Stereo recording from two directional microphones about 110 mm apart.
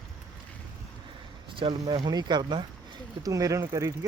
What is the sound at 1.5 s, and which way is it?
Speech, 45° right (ahead or behind).